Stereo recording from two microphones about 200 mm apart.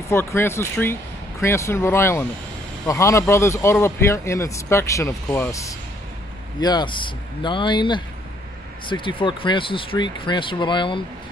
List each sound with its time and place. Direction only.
0.1 s speech: 10° left (ahead or behind)